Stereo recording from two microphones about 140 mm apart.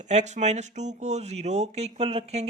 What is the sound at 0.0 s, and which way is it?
Speech, 55° right (ahead or behind).